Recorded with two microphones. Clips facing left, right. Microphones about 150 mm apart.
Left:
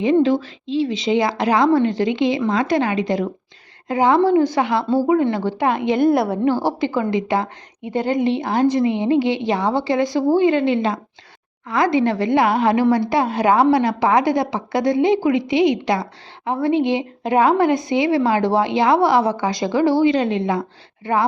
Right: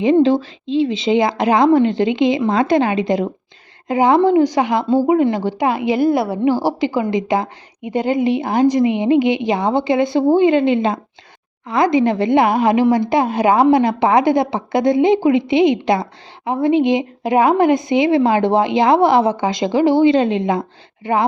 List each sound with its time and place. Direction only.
0.0 s a woman's voice: 25° right (ahead or behind)